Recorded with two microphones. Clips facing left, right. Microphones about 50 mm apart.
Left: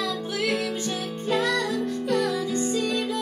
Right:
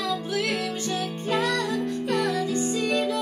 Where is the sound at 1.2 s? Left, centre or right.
Centre.